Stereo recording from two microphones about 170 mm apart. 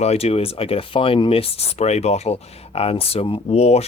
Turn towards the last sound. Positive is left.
turn(degrees=40)  # may be behind; listen again after turning